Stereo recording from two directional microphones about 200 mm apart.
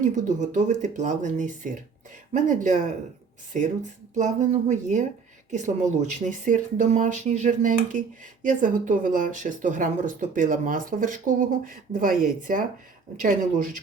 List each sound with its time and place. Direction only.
0.0 s speech: 40° right (ahead or behind)
4.1 s speech: 35° right (ahead or behind)